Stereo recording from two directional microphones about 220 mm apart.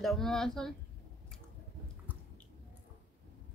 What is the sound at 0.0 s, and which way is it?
Speech, centre (ahead or behind).